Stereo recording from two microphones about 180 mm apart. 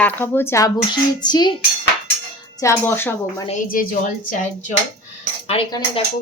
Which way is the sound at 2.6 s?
15° left (ahead or behind).